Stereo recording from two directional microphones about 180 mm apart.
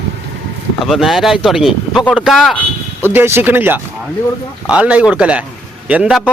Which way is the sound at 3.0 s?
10° right (ahead or behind).